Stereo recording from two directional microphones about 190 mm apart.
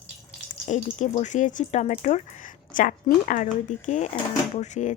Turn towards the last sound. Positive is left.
turn(degrees=40)  # may be behind; listen again after turning